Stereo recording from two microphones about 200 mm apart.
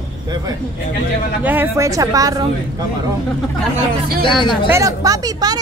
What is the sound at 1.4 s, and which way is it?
A woman's voice, 10° right (ahead or behind).